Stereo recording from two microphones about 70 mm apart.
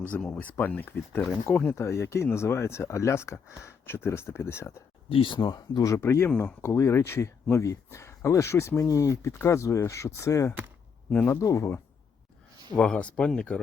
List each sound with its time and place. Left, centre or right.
0.2 s speech: centre; by 4.7 s left
5.4 s speech: left
6.0 s speech: left
11.1 s speech: left
11.3 s speech: left
12.7 s speech: centre